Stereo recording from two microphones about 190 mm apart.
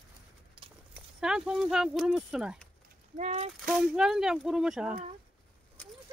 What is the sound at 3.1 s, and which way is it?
Speech, 35° right (ahead or behind).